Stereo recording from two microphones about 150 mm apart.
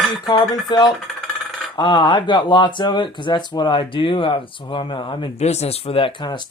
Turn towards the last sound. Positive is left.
turn(degrees=30)  # may be behind; listen again after turning